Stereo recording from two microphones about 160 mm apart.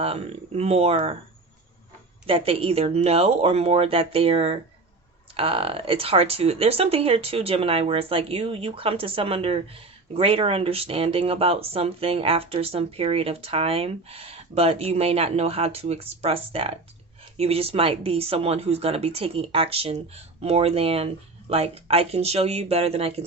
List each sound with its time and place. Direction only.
0.0 s speech: 40° right (ahead or behind)
2.2 s speech: 35° right (ahead or behind)